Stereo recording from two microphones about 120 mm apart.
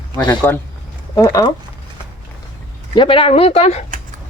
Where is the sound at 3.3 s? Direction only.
60° left (ahead or behind).